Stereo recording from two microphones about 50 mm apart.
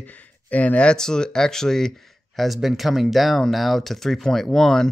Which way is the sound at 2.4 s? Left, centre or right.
Centre.